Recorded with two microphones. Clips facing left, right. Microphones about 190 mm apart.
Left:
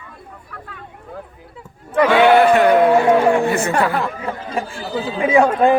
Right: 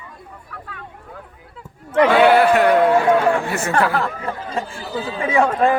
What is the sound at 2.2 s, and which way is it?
A man's voice, 5° right (ahead or behind).